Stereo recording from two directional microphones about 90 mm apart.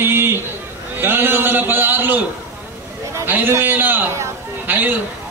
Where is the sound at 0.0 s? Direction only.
25° right (ahead or behind).